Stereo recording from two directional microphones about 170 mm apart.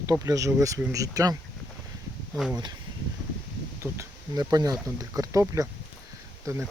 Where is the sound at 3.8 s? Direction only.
20° right (ahead or behind).